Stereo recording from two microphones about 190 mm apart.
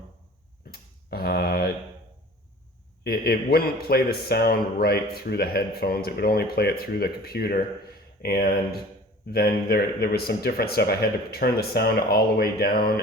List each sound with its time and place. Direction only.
0.6 s tick-tock: 55° left (ahead or behind)
3.0 s a man's voice: 55° left (ahead or behind)